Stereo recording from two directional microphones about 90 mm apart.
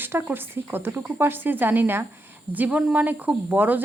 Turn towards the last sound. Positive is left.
turn(degrees=-20)  # may be behind; listen again after turning